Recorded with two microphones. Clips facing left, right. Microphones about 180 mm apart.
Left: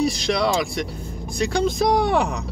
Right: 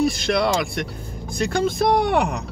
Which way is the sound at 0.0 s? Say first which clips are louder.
Right 1 dB; 55° right (ahead or behind).